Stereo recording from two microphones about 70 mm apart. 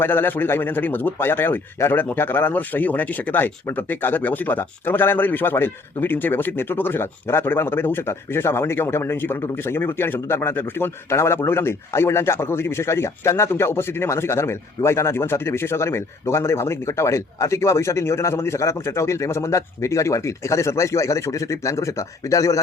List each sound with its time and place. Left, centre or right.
0.0 s speech: left